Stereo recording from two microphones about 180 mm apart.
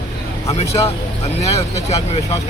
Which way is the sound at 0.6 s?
35° left (ahead or behind).